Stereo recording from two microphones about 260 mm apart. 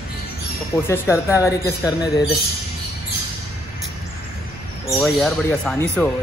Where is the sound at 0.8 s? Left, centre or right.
Centre.